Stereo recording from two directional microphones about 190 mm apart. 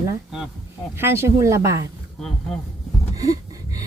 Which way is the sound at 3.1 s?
20° right (ahead or behind).